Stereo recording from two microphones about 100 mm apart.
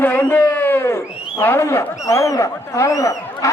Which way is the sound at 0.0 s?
20° left (ahead or behind).